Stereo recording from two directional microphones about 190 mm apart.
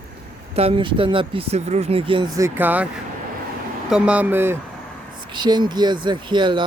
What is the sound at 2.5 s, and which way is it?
Speech, 10° right (ahead or behind).